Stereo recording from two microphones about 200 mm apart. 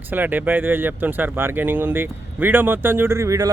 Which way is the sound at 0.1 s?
10° right (ahead or behind).